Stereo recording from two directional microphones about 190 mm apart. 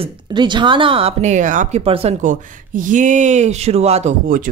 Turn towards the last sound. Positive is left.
turn(degrees=-45)  # may be behind; listen again after turning